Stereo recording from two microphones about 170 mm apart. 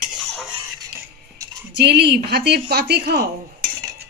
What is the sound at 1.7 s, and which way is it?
Speech, 75° right (ahead or behind).